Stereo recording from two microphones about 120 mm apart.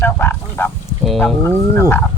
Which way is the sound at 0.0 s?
20° left (ahead or behind).